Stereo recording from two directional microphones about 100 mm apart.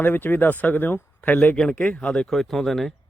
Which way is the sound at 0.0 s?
20° left (ahead or behind).